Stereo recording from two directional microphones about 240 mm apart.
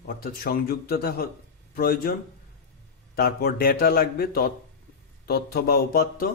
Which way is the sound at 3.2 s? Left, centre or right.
Left.